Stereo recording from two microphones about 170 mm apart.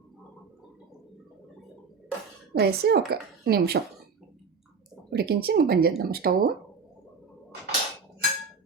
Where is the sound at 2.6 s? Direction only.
75° right (ahead or behind).